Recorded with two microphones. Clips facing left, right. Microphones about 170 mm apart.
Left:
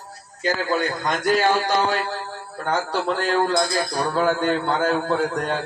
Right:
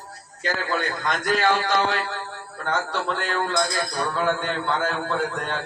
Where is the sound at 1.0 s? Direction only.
40° left (ahead or behind).